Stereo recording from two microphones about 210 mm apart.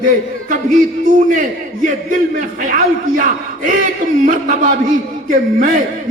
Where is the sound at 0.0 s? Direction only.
40° right (ahead or behind).